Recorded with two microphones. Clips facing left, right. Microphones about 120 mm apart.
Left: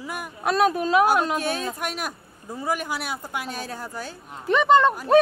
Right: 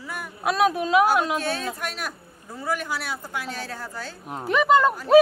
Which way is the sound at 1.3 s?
10° left (ahead or behind).